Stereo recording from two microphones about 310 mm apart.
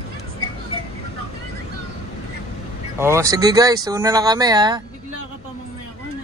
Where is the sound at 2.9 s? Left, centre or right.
Centre.